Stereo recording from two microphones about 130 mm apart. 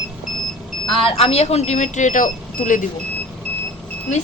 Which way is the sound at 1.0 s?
50° left (ahead or behind).